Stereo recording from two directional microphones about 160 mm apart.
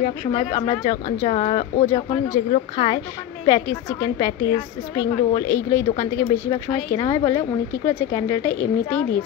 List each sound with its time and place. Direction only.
0.6 s speech: 35° left (ahead or behind)
3.4 s a woman's voice: 25° left (ahead or behind)
6.5 s speech: 35° left (ahead or behind)
7.2 s speech: 15° left (ahead or behind)